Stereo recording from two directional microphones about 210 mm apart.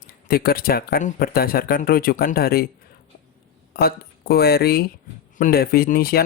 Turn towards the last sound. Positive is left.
turn(degrees=45)  # may be behind; listen again after turning